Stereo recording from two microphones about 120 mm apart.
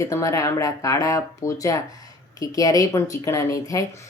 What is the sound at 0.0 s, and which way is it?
Speech, 25° left (ahead or behind).